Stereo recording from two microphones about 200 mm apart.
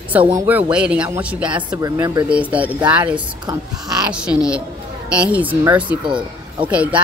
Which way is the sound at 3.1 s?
20° right (ahead or behind).